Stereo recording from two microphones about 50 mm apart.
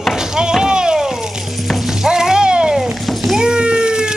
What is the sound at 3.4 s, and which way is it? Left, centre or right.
Cat, centre.